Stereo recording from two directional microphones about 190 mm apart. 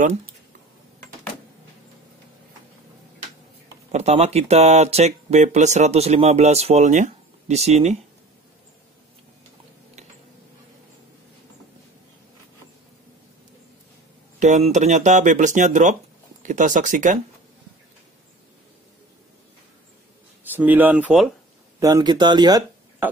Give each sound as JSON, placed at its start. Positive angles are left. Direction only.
{"t": 3.9, "sound": "speech", "side_deg": -35}
{"t": 14.4, "sound": "speech", "side_deg": -40}
{"t": 20.5, "sound": "speech", "side_deg": -10}
{"t": 21.7, "sound": "speech", "side_deg": -20}